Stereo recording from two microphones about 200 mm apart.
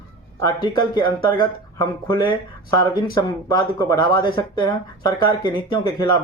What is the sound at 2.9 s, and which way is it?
Speech, 20° left (ahead or behind).